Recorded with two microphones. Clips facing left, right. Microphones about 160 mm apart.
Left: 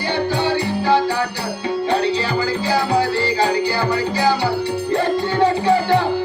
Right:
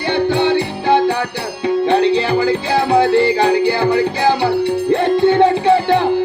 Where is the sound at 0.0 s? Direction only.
25° right (ahead or behind).